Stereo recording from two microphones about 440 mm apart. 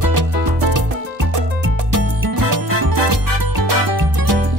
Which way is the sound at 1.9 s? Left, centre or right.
Right.